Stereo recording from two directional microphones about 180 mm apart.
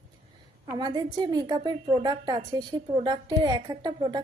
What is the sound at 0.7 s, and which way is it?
A woman's voice, 25° right (ahead or behind).